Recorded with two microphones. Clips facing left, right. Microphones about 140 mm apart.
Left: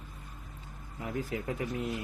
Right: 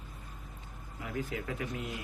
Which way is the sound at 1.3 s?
30° left (ahead or behind).